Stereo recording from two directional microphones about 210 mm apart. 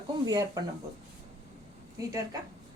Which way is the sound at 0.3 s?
20° right (ahead or behind).